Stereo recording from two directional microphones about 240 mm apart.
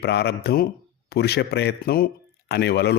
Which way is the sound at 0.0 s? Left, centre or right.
Left.